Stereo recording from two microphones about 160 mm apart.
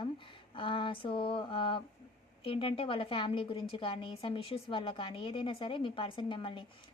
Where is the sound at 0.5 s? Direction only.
30° left (ahead or behind).